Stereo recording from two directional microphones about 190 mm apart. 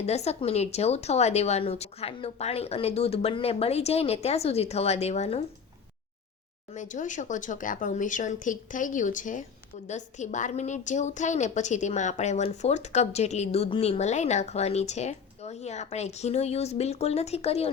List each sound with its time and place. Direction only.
0.0 s a woman's voice: 35° left (ahead or behind)
6.7 s a woman's voice: 40° left (ahead or behind)